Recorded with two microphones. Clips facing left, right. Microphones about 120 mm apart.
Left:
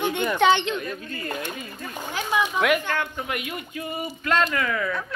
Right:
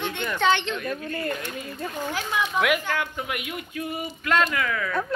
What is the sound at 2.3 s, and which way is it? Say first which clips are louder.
Speech: left 2 dB; 5° left (ahead or behind).